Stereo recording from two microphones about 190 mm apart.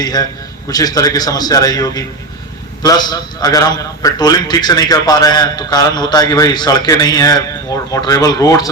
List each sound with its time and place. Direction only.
0.0 s a man's voice: 20° left (ahead or behind)